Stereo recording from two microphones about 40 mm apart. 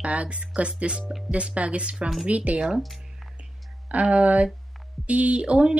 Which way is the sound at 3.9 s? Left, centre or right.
Right.